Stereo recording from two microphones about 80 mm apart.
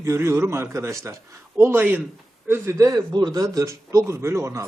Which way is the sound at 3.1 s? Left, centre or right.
Right.